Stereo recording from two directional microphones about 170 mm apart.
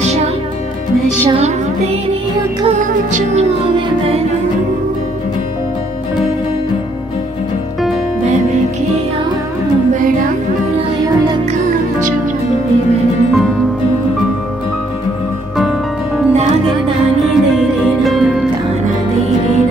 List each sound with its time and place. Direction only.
2.8 s music: 50° right (ahead or behind)
18.0 s music: centre (ahead or behind)